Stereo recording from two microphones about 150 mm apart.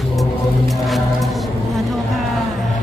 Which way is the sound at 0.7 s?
Centre (ahead or behind).